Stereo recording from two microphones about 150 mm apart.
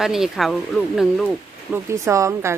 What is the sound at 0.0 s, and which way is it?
A woman's voice, 5° right (ahead or behind).